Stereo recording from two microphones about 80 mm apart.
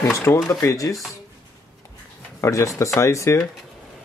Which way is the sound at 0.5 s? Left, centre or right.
Left.